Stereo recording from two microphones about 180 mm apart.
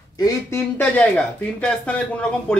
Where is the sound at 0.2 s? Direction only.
15° left (ahead or behind).